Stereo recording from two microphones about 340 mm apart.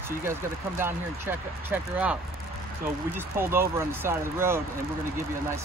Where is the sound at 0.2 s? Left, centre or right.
Centre.